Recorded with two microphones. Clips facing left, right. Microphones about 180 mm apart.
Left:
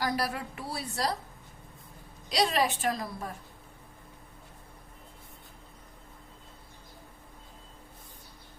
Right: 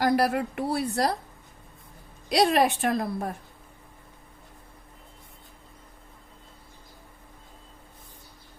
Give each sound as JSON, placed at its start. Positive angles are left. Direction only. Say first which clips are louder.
{"t": 0.0, "sound": "a woman's voice", "louder": "right 8 dB", "side_deg": -60}
{"t": 2.3, "sound": "a woman's voice", "louder": "right 6 dB", "side_deg": -55}